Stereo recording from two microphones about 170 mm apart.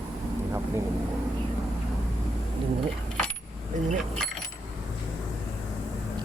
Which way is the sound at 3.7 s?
50° right (ahead or behind).